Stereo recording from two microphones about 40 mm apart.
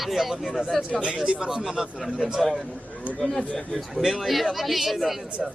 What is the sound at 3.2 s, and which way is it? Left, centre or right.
Speech, centre.